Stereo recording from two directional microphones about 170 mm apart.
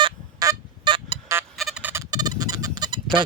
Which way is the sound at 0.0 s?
25° right (ahead or behind).